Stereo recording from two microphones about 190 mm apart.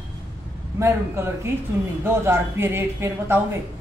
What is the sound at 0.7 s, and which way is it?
A woman's voice, 15° right (ahead or behind).